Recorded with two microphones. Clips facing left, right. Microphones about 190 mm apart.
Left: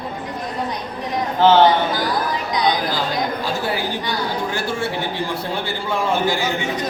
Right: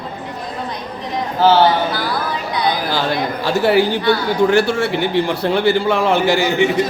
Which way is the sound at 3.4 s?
75° right (ahead or behind).